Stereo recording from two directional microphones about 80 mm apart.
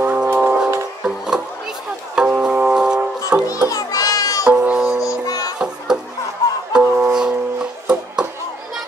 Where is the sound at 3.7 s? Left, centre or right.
Left.